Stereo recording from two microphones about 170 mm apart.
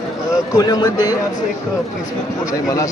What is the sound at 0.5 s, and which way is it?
Speech, 20° left (ahead or behind).